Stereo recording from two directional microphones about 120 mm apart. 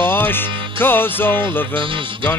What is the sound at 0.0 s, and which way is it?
Music, 20° left (ahead or behind).